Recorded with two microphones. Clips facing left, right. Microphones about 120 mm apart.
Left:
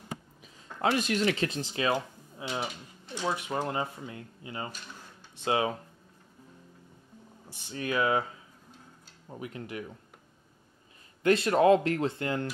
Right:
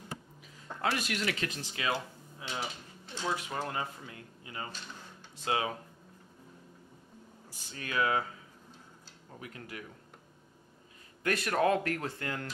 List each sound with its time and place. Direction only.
0.7 s speech: 25° left (ahead or behind)
1.9 s a sound: 20° left (ahead or behind)
3.2 s speech: 20° left (ahead or behind)
7.4 s speech: 25° left (ahead or behind)
9.3 s speech: 25° left (ahead or behind)
11.2 s speech: 25° left (ahead or behind)